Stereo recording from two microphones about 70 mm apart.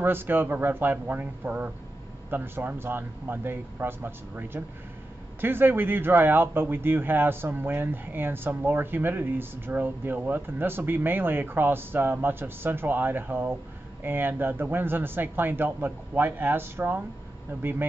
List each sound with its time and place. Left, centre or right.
0.0 s speech: right